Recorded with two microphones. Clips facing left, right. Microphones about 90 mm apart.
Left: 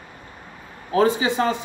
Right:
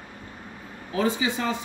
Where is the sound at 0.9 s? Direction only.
50° left (ahead or behind).